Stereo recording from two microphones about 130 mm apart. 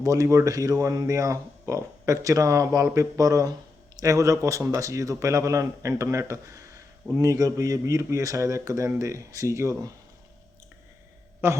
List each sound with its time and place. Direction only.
0.0 s speech: 25° right (ahead or behind)
11.4 s speech: 20° right (ahead or behind)